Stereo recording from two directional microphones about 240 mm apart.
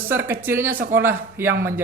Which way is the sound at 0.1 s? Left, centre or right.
Centre.